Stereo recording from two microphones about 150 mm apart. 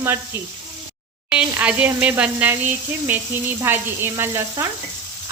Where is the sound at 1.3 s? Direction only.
10° right (ahead or behind).